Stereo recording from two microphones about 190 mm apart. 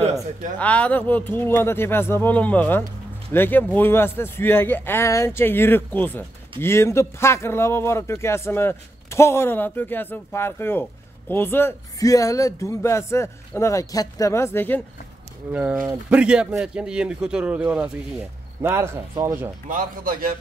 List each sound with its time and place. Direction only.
0.6 s speech: 5° left (ahead or behind)
15.5 s speech: 5° right (ahead or behind)
19.7 s a man's voice: 50° right (ahead or behind)